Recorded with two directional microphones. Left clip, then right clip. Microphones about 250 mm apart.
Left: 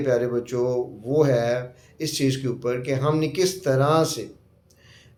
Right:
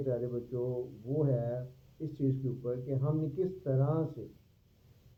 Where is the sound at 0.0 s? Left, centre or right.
Centre.